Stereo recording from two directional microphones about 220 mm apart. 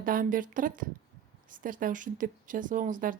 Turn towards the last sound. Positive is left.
turn(degrees=-35)  # may be behind; listen again after turning